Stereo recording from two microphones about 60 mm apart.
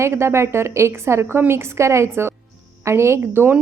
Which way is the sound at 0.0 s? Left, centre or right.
Right.